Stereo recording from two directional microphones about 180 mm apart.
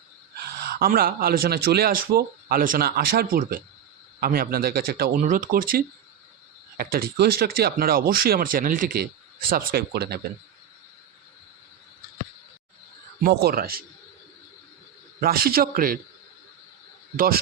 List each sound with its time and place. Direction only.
0.6 s speech: 60° right (ahead or behind)
5.2 s speech: 45° right (ahead or behind); by 10.2 s 65° right (ahead or behind)
13.2 s speech: 60° right (ahead or behind)
15.2 s speech: 55° right (ahead or behind)